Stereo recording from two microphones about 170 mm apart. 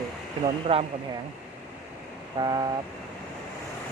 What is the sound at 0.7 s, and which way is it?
Speech, 40° right (ahead or behind).